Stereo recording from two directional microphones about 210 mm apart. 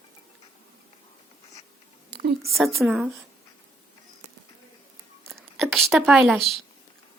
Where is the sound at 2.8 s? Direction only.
5° right (ahead or behind).